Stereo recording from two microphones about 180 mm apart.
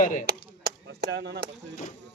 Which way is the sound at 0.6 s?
65° right (ahead or behind).